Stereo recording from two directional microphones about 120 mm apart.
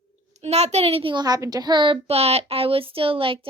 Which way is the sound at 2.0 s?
60° right (ahead or behind).